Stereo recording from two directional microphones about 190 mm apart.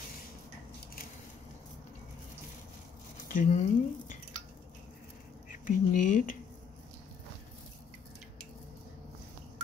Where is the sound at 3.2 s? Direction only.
45° left (ahead or behind).